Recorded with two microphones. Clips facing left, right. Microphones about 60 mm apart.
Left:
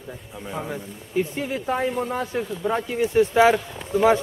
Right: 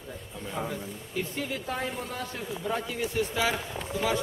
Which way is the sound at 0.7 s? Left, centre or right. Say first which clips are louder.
Left 5 dB; left.